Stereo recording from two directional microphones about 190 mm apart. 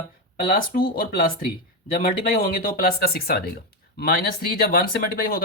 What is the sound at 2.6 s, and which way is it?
Speech, 50° left (ahead or behind).